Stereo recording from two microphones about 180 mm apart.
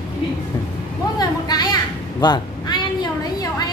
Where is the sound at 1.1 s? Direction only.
20° left (ahead or behind).